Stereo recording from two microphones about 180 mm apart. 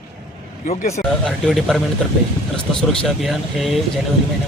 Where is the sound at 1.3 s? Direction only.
Centre (ahead or behind).